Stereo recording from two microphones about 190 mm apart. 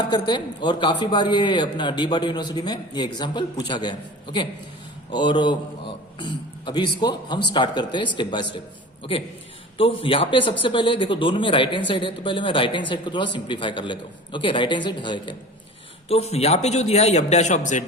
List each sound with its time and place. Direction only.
0.0 s a man's voice: 25° left (ahead or behind)
9.7 s a man's voice: 30° left (ahead or behind)